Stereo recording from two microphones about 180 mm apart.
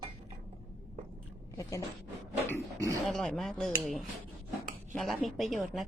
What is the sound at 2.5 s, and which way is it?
Speech, 15° right (ahead or behind).